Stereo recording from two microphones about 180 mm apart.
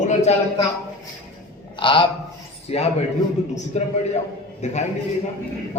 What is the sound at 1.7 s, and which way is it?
A man's voice, 25° left (ahead or behind).